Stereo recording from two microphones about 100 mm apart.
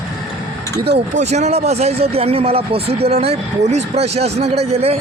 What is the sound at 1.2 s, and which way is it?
Speech, 90° right.